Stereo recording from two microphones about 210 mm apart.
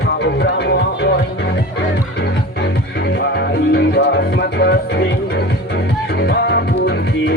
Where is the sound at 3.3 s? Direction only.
50° left (ahead or behind).